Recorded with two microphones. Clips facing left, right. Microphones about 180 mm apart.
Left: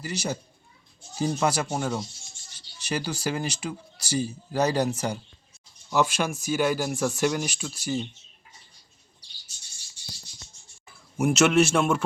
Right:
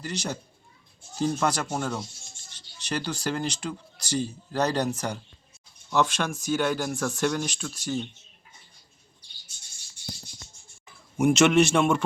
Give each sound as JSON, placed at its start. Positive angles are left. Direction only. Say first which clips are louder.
{"t": 0.0, "sound": "a man's voice", "louder": "left 2 dB", "side_deg": 5}
{"t": 9.5, "sound": "a sound", "louder": "even", "side_deg": -55}
{"t": 11.2, "sound": "a man's voice", "louder": "right 1 dB", "side_deg": 5}